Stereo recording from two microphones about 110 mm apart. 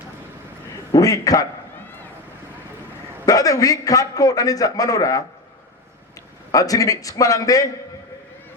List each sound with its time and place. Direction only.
0.9 s a man's voice: 30° left (ahead or behind)
3.2 s a man's voice: 30° left (ahead or behind)
6.5 s a man's voice: 30° left (ahead or behind)